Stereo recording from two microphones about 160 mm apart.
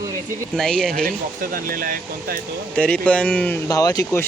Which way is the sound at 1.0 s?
65° right (ahead or behind).